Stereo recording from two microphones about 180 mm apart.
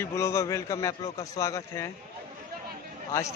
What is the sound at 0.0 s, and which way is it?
A man's voice, 15° left (ahead or behind).